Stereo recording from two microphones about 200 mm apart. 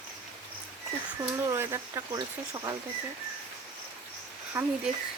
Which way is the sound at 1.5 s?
15° right (ahead or behind).